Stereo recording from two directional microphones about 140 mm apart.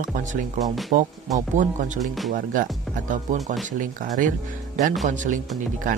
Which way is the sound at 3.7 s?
70° right (ahead or behind).